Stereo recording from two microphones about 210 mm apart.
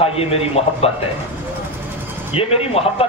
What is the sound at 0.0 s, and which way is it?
Speech, 30° left (ahead or behind).